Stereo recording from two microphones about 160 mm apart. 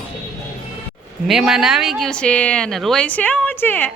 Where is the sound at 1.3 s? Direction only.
5° right (ahead or behind).